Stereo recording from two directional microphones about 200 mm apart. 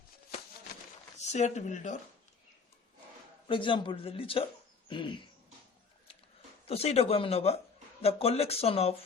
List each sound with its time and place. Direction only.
1.2 s speech: 35° left (ahead or behind)
3.5 s a man's voice: 25° left (ahead or behind)
6.7 s a man's voice: 30° left (ahead or behind)